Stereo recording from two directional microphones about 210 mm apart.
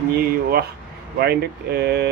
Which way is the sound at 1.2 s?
50° right (ahead or behind).